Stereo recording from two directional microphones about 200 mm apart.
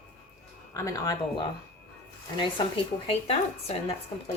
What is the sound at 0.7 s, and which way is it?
A woman's voice, 15° left (ahead or behind).